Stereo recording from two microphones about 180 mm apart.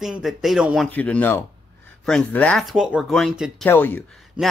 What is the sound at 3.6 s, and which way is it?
Speech, 10° left (ahead or behind).